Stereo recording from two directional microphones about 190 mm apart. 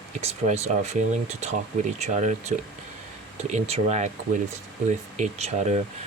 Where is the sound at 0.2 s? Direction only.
35° right (ahead or behind).